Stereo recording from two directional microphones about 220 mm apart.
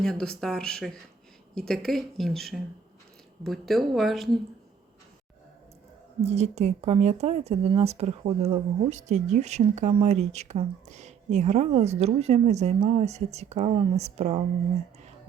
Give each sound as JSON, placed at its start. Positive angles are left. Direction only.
{"t": 0.0, "sound": "speech", "side_deg": 5}
{"t": 6.2, "sound": "speech", "side_deg": -30}